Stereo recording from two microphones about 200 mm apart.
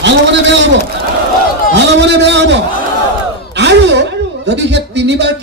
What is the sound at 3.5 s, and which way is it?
Gasp, 60° right (ahead or behind).